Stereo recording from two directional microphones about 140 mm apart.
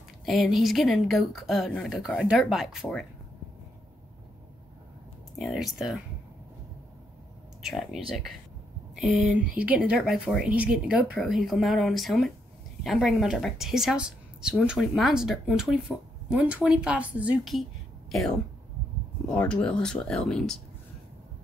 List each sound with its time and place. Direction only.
0.2 s a woman's voice: centre (ahead or behind)
5.4 s a woman's voice: centre (ahead or behind)
7.6 s a woman's voice: centre (ahead or behind)